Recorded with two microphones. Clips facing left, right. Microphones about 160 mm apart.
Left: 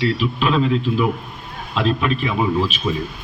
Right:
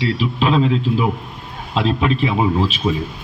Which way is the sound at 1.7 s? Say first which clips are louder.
Right 2 dB; 30° right (ahead or behind).